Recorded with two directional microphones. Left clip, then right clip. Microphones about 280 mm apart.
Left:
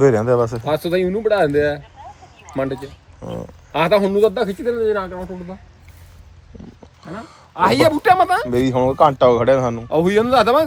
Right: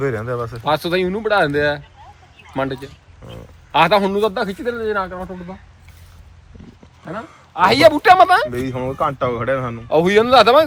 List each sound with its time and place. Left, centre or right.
0.0 s speech: left
0.6 s a man's voice: centre
3.7 s a man's voice: centre
7.1 s a man's voice: centre
8.7 s speech: left; by 10.6 s centre